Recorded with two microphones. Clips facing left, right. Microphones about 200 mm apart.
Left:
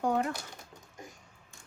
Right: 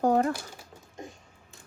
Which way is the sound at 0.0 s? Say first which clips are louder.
Right 6 dB; 35° right (ahead or behind).